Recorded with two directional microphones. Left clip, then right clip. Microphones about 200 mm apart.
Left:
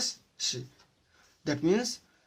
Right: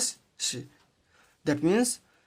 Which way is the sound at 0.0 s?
45° right (ahead or behind).